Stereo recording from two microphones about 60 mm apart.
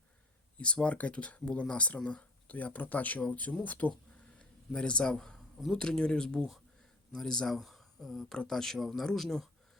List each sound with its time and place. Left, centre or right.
0.6 s speech: centre
4.4 s a sound: centre
5.1 s speech: centre
8.3 s speech: centre